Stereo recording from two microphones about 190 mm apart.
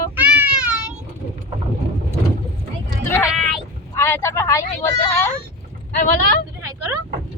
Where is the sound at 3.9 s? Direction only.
15° left (ahead or behind).